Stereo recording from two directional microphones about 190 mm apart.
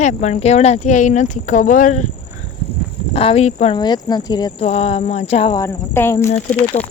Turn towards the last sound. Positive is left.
turn(degrees=35)  # may be behind; listen again after turning